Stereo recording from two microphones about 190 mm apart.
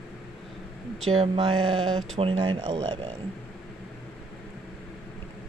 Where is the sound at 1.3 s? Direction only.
30° right (ahead or behind).